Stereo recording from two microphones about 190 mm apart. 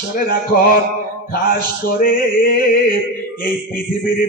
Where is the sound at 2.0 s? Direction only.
50° left (ahead or behind).